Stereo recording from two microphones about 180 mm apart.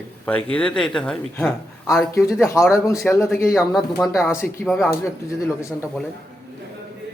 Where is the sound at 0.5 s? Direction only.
5° left (ahead or behind).